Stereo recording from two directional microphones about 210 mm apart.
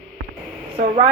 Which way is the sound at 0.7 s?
30° right (ahead or behind).